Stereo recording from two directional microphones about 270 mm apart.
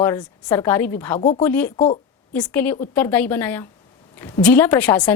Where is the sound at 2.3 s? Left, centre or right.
Centre.